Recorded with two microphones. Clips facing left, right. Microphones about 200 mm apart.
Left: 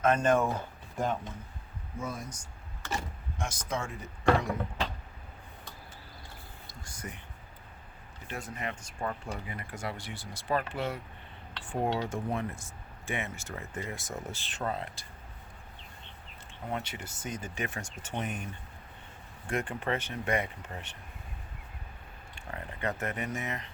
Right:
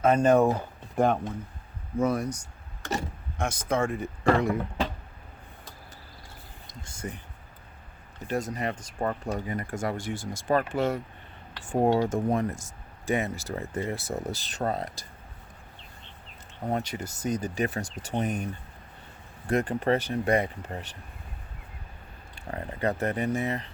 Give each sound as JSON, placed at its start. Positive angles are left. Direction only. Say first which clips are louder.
{"t": 0.0, "sound": "speech", "louder": "right 5 dB", "side_deg": -35}
{"t": 0.9, "sound": "speech", "louder": "right 8 dB", "side_deg": -65}
{"t": 6.7, "sound": "speech", "louder": "right 6 dB", "side_deg": -25}
{"t": 8.3, "sound": "speech", "louder": "right 9 dB", "side_deg": -40}
{"t": 16.6, "sound": "speech", "louder": "right 7 dB", "side_deg": -40}
{"t": 22.4, "sound": "speech", "louder": "right 7 dB", "side_deg": -35}